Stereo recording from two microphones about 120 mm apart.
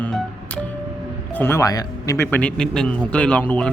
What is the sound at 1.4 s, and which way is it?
Speech, 20° left (ahead or behind).